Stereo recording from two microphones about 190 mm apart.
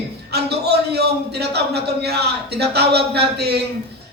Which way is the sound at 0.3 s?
60° right (ahead or behind).